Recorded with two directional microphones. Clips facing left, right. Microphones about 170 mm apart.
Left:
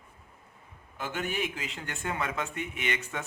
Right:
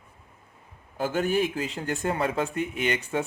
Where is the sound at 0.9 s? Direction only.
35° right (ahead or behind).